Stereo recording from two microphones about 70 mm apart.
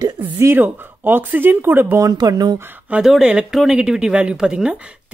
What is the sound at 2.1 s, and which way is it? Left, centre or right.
Speech, right.